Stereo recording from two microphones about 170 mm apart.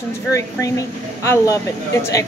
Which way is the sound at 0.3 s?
20° left (ahead or behind).